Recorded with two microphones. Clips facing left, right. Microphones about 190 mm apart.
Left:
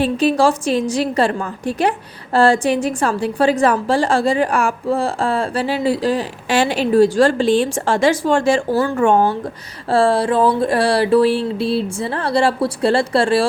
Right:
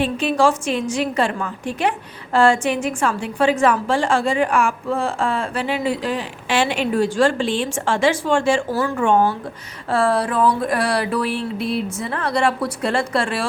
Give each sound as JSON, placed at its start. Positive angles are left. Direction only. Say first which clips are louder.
{"t": 0.0, "sound": "a woman's voice", "louder": "left 3 dB", "side_deg": 35}
{"t": 9.9, "sound": "a woman's voice", "louder": "left 4 dB", "side_deg": 30}